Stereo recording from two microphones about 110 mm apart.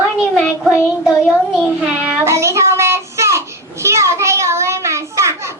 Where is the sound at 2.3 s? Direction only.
25° right (ahead or behind).